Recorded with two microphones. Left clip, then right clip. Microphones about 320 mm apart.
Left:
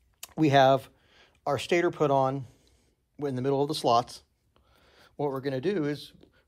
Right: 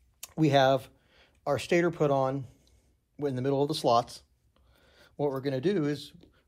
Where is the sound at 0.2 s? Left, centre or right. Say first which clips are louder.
Left 3 dB; left.